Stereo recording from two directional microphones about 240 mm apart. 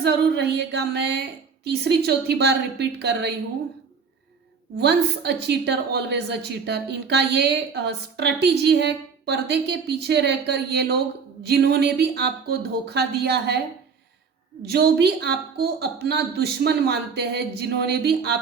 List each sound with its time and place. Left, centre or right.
0.0 s a woman's voice: right
4.8 s a woman's voice: right
14.6 s a woman's voice: right